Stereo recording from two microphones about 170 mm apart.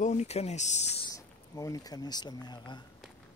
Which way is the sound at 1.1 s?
20° left (ahead or behind).